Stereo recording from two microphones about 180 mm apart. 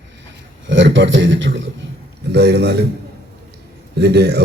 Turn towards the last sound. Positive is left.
turn(degrees=-65)  # may be behind; listen again after turning